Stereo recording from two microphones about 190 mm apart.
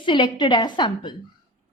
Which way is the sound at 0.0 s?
25° left (ahead or behind).